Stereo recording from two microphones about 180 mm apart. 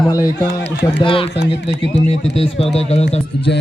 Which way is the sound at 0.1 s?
20° left (ahead or behind).